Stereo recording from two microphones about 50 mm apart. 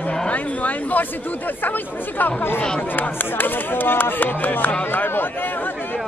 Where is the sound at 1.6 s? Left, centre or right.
Left.